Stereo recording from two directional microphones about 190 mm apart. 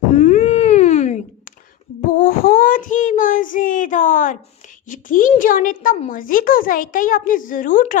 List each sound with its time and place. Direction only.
0.1 s a sound: 40° left (ahead or behind)
2.0 s child singing: 50° left (ahead or behind)
4.9 s a child's voice: 45° left (ahead or behind)